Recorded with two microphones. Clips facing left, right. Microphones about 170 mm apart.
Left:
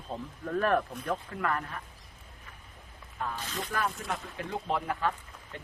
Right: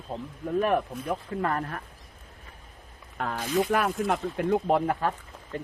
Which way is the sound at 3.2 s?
90° right.